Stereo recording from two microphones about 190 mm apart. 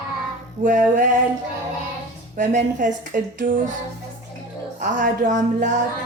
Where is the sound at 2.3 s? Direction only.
40° right (ahead or behind).